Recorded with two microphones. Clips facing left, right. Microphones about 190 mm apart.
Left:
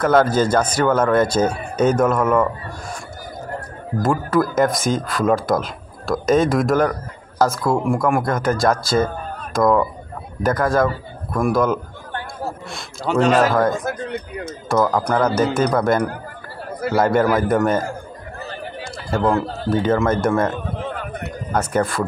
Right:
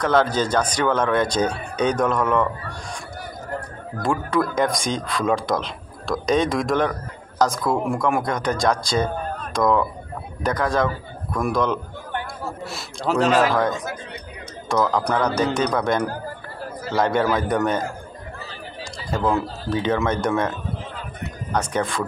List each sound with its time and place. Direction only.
0.0 s speech: 10° left (ahead or behind)
4.0 s speech: 5° left (ahead or behind)
13.7 s speech: 50° left (ahead or behind)
14.7 s speech: 5° left (ahead or behind)
18.4 s chatter: 55° left (ahead or behind)
19.4 s speech: 60° left (ahead or behind)
19.9 s speech: 5° left (ahead or behind)
20.4 s a sound: 60° left (ahead or behind)
21.5 s speech: 5° left (ahead or behind)